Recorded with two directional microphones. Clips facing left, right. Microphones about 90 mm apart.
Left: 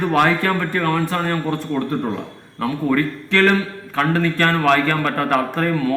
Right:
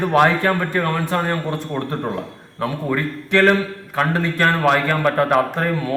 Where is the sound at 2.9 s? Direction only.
20° right (ahead or behind).